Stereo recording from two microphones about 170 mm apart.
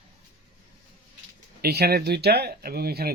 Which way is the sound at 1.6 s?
70° right (ahead or behind).